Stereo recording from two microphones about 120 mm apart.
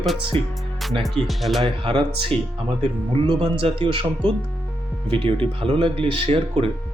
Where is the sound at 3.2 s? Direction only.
45° right (ahead or behind).